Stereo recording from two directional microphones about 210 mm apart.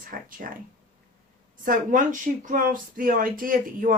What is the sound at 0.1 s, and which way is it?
Speech, 40° right (ahead or behind).